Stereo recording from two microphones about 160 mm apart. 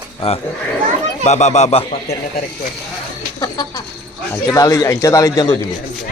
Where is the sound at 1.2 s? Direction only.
45° left (ahead or behind).